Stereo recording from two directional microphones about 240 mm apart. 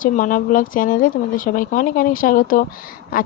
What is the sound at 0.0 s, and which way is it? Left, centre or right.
Speech, left.